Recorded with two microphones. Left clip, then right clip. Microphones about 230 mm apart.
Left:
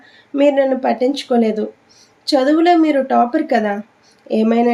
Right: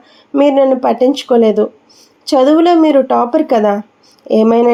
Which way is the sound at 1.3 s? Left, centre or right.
Centre.